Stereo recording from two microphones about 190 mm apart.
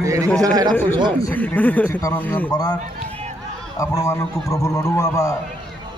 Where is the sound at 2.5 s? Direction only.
20° left (ahead or behind).